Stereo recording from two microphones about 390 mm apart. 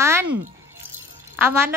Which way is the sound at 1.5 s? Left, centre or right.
Centre.